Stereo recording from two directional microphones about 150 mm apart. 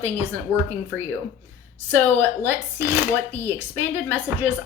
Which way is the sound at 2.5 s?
15° right (ahead or behind).